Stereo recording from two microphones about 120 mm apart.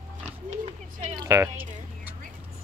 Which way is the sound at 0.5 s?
70° right (ahead or behind).